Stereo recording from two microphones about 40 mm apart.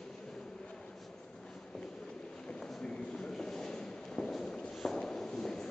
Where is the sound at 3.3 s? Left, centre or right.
Centre.